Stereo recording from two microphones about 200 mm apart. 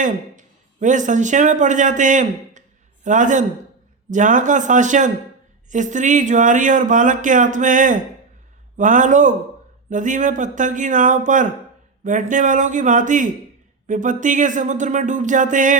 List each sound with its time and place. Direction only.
0.0 s a man's voice: 40° right (ahead or behind)